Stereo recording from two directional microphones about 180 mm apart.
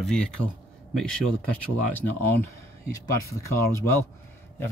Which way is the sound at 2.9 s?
15° left (ahead or behind).